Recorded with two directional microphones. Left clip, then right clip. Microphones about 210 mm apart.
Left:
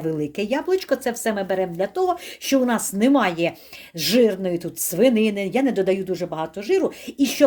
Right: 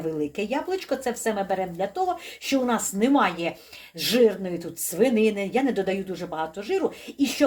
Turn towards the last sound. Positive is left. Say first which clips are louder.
# left 4 dB
turn(degrees=45)  # may be behind; listen again after turning